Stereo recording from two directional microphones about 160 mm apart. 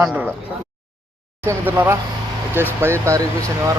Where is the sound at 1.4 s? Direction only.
15° right (ahead or behind).